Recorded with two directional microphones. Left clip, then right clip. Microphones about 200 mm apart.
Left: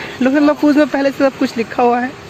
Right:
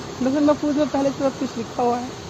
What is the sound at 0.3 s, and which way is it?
Speech, 25° left (ahead or behind).